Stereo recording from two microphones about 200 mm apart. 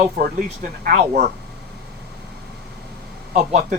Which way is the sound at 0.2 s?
50° right (ahead or behind).